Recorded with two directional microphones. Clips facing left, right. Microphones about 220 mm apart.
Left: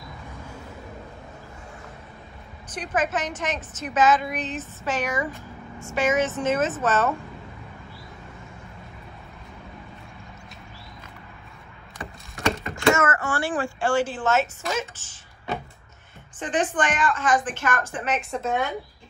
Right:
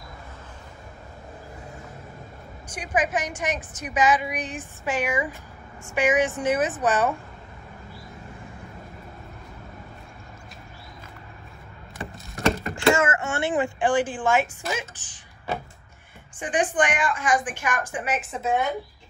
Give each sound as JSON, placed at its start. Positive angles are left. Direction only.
{"t": 2.7, "sound": "a woman's voice", "side_deg": -10}
{"t": 12.4, "sound": "mechanisms", "side_deg": 0}
{"t": 12.7, "sound": "a woman's voice", "side_deg": -30}
{"t": 16.3, "sound": "a woman's voice", "side_deg": -15}